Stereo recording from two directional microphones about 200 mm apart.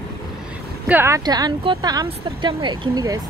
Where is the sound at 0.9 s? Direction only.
10° right (ahead or behind).